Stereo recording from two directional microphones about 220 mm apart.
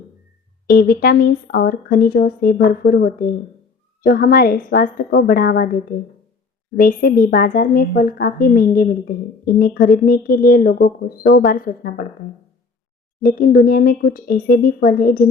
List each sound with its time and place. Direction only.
0.7 s a woman's voice: 45° left (ahead or behind)